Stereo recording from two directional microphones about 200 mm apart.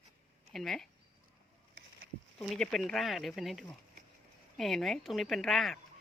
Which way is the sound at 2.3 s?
Centre (ahead or behind).